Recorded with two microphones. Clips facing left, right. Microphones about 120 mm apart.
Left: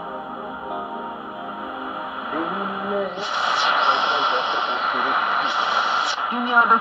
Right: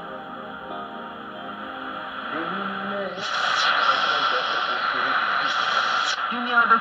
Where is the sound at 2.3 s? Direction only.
30° left (ahead or behind).